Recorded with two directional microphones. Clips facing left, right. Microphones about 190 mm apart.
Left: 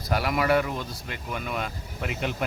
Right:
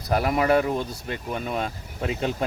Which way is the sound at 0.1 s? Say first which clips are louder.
Right 3 dB; 25° right (ahead or behind).